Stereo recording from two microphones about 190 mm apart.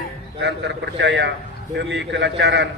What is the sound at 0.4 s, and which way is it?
A man's voice, 65° right (ahead or behind).